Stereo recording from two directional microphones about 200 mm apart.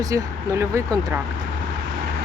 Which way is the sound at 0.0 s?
15° right (ahead or behind).